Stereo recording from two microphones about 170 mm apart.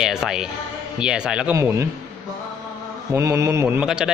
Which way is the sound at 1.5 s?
15° right (ahead or behind).